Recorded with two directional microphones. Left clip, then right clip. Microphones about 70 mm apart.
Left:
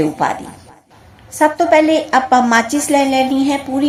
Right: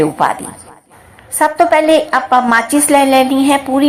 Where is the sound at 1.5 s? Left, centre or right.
Centre.